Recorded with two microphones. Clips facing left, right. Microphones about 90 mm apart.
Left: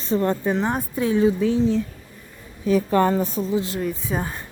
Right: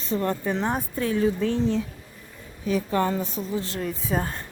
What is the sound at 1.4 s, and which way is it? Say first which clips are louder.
Speech: left 4 dB; 5° left (ahead or behind).